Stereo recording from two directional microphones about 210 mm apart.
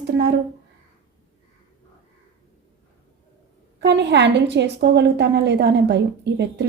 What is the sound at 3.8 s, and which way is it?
A woman's voice, 55° right (ahead or behind).